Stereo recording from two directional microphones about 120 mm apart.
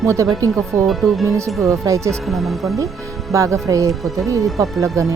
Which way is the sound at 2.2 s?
Centre (ahead or behind).